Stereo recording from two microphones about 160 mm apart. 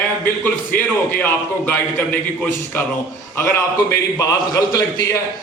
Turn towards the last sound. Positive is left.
turn(degrees=20)  # may be behind; listen again after turning